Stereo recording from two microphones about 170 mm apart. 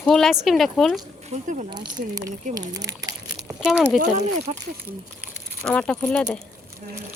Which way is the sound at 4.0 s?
40° right (ahead or behind).